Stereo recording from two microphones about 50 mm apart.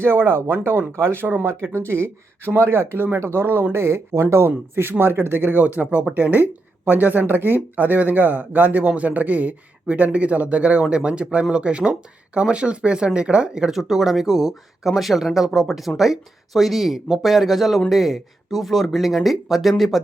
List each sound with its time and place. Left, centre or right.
0.0 s speech: right
1.7 s speech: right
4.4 s speech: right
6.1 s speech: right; by 13.7 s centre
13.7 s speech: centre